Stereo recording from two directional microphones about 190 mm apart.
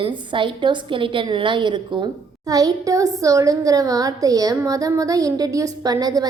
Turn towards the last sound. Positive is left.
turn(degrees=-20)  # may be behind; listen again after turning